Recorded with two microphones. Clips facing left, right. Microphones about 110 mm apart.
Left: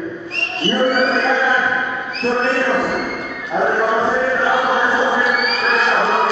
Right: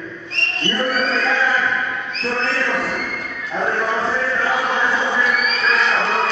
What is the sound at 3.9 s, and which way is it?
Chant, 30° left (ahead or behind).